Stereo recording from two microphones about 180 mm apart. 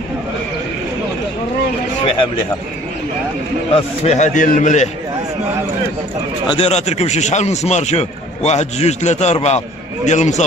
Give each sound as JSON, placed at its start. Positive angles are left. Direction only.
{"t": 3.7, "sound": "a man's voice", "side_deg": 35}
{"t": 6.5, "sound": "a man's voice", "side_deg": 35}